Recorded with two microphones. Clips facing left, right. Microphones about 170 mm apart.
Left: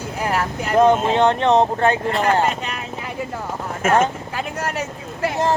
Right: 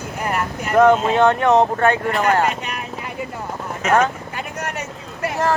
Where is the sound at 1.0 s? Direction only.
25° left (ahead or behind).